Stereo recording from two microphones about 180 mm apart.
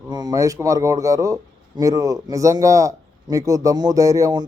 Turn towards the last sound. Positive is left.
turn(degrees=-20)  # may be behind; listen again after turning